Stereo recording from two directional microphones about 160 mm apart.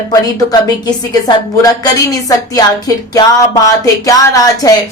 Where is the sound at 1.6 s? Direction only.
20° left (ahead or behind).